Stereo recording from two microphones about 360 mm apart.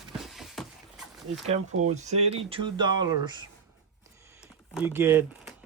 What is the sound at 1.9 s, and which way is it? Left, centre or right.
Speech, centre.